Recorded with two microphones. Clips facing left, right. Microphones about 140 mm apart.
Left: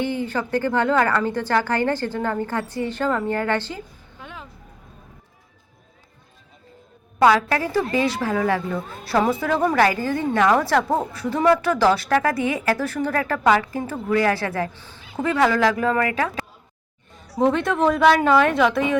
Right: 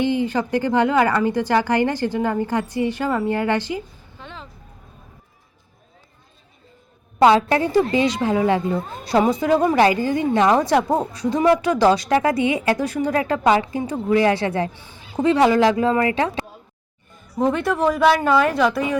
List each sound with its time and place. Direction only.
0.0 s a woman's voice: 15° right (ahead or behind)
4.2 s vehicle: 10° left (ahead or behind)
7.2 s a woman's voice: 25° right (ahead or behind)
17.2 s a sound: 80° left
17.4 s speech: centre (ahead or behind)